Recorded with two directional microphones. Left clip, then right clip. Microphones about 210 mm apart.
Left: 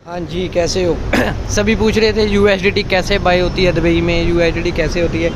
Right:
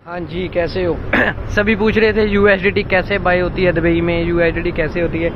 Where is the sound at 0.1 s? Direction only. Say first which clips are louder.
Left 2 dB; 15° left (ahead or behind).